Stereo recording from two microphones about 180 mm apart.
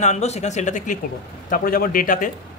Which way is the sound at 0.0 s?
40° left (ahead or behind).